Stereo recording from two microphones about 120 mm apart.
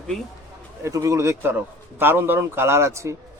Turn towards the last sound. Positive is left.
turn(degrees=-25)  # may be behind; listen again after turning